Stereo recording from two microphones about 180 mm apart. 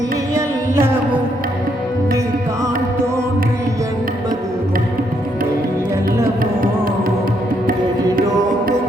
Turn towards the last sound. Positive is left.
turn(degrees=-55)  # may be behind; listen again after turning